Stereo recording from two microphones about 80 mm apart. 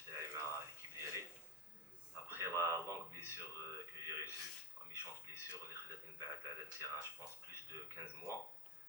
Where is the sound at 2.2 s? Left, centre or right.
Right.